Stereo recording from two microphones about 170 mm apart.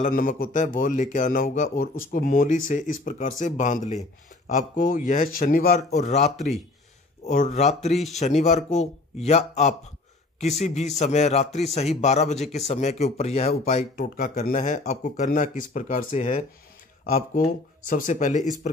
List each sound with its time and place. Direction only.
0.0 s a man's voice: 50° left (ahead or behind)
13.5 s speech: 55° left (ahead or behind)